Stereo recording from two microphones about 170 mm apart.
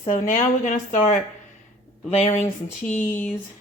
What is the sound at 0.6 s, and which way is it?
Speech, 45° left (ahead or behind).